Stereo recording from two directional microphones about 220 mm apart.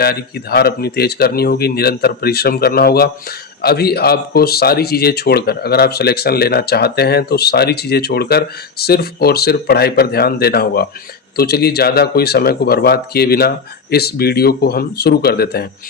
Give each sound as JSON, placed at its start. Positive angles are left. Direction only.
{"t": 0.0, "sound": "speech", "side_deg": 45}